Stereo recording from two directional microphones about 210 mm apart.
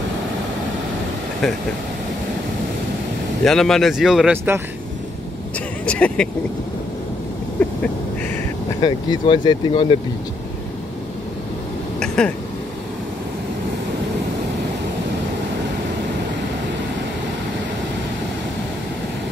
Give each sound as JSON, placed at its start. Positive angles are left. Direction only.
{"t": 3.4, "sound": "speech", "side_deg": 0}
{"t": 5.9, "sound": "speech", "side_deg": 5}
{"t": 7.6, "sound": "duck", "side_deg": 5}
{"t": 8.8, "sound": "speech", "side_deg": 20}
{"t": 12.2, "sound": "speech", "side_deg": 5}